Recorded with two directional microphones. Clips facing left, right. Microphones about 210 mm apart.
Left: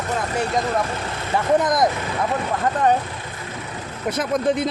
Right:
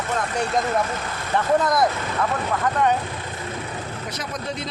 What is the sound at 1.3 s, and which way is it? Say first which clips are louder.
Speech: left 1 dB; 15° left (ahead or behind).